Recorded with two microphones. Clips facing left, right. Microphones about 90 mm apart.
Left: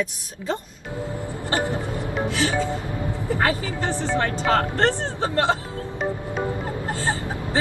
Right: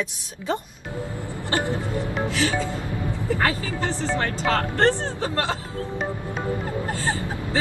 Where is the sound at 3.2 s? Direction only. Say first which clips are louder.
Left 1 dB; 20° left (ahead or behind).